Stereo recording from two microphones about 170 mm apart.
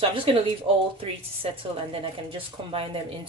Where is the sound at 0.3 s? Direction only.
30° right (ahead or behind).